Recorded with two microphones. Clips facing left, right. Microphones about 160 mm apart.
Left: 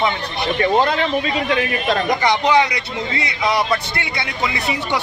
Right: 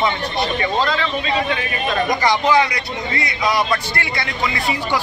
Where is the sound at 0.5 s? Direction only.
55° left (ahead or behind).